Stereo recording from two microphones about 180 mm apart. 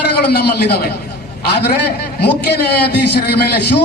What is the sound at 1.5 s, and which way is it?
Speech, 65° left (ahead or behind).